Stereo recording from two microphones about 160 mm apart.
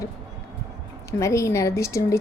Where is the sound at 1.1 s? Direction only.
20° left (ahead or behind).